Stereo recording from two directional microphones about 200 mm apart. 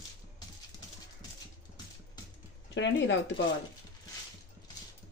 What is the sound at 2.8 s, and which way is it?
Speech, 65° left (ahead or behind).